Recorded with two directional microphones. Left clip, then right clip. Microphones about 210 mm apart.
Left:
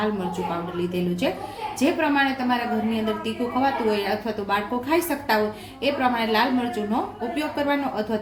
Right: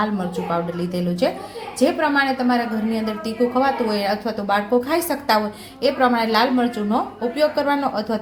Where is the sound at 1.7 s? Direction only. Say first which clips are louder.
Right 4 dB; 30° right (ahead or behind).